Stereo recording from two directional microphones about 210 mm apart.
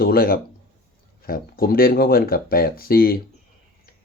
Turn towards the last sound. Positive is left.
turn(degrees=45)  # may be behind; listen again after turning